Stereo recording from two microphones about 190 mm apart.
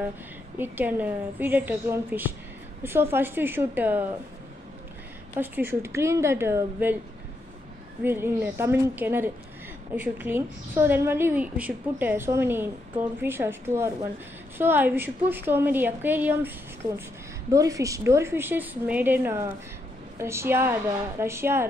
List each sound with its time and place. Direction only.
0.6 s a woman's voice: 10° right (ahead or behind)
5.3 s a woman's voice: 10° right (ahead or behind)
8.0 s a woman's voice: 10° right (ahead or behind)